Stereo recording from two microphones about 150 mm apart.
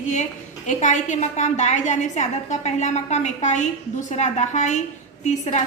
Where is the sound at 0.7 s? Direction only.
55° left (ahead or behind).